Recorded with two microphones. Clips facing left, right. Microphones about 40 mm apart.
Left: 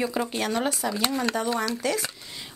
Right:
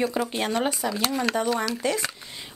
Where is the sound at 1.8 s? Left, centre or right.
Right.